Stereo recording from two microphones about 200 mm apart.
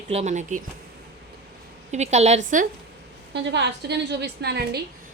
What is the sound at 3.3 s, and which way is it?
A woman's voice, 60° right (ahead or behind).